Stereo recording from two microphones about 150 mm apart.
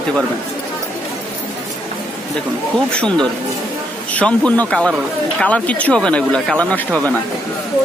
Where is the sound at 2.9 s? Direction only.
5° left (ahead or behind).